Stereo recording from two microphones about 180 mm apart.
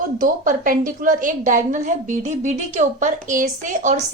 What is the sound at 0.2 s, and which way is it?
A woman's voice, 50° right (ahead or behind).